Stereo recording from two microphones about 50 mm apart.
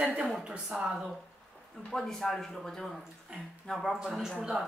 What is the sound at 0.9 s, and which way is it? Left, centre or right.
Speech, centre.